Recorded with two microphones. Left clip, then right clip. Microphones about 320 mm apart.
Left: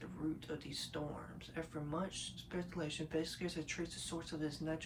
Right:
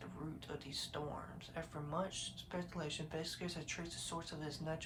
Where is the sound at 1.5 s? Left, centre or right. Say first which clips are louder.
Even; centre.